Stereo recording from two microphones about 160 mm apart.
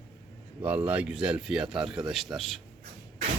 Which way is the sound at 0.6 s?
10° right (ahead or behind).